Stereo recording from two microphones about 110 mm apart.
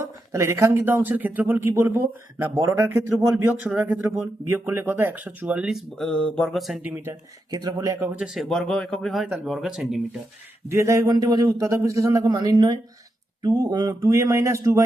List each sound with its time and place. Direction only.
0.0 s speech: 25° right (ahead or behind)
5.6 s speech: centre (ahead or behind)
6.1 s a sound: 10° left (ahead or behind)
6.8 s speech: 20° right (ahead or behind)
7.5 s speech: 40° right (ahead or behind)
8.1 s speech: 5° right (ahead or behind)
10.7 s speech: 25° right (ahead or behind)